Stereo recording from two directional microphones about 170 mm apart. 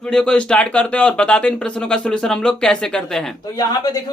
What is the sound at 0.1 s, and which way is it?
Speech, 5° left (ahead or behind).